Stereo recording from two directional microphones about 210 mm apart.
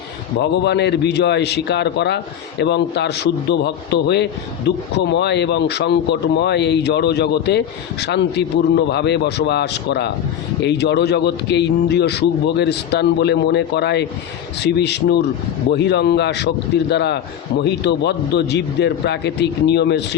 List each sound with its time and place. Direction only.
0.3 s a man's voice: 55° left (ahead or behind)